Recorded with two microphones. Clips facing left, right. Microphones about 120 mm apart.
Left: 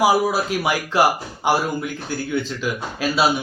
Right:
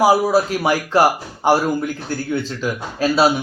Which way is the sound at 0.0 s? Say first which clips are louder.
Right 3 dB; 35° right (ahead or behind).